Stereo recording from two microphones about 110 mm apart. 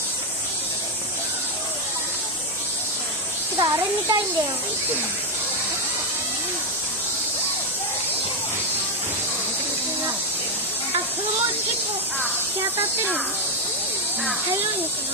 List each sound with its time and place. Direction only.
3.5 s speech: 35° right (ahead or behind)
12.7 s speech: 20° right (ahead or behind)